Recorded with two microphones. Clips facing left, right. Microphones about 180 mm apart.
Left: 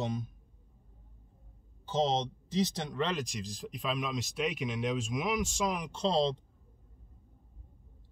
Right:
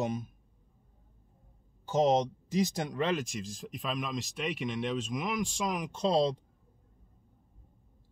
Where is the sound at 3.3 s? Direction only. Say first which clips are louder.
Right 1 dB; centre (ahead or behind).